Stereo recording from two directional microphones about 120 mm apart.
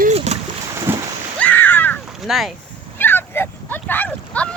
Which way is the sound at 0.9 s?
15° right (ahead or behind).